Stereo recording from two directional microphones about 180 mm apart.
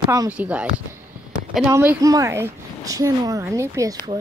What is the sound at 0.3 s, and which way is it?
Speech, 10° right (ahead or behind).